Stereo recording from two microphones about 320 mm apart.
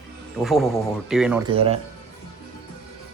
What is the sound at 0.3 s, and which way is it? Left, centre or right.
Speech, centre.